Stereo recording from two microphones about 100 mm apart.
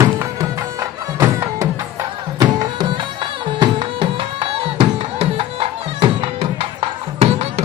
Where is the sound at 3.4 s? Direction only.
55° right (ahead or behind); by 7.5 s 85° right.